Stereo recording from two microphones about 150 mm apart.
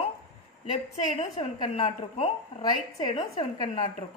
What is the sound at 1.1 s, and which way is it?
A woman's voice, 40° left (ahead or behind).